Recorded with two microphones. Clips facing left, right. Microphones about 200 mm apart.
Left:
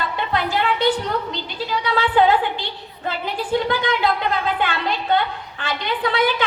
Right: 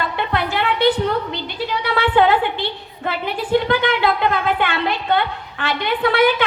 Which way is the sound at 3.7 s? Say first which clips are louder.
Right 3 dB; 60° right (ahead or behind).